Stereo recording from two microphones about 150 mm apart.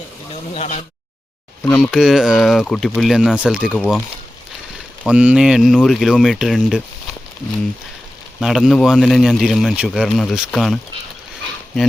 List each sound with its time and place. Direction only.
0.5 s speech: 50° left (ahead or behind)
1.6 s speech: 5° left (ahead or behind)
5.0 s speech: 5° right (ahead or behind)
8.4 s speech: centre (ahead or behind)